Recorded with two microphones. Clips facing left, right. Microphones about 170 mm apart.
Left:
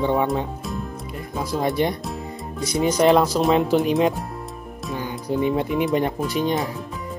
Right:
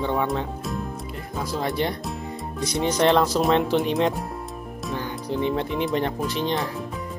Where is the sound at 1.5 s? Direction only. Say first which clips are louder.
Left 4 dB; 15° left (ahead or behind).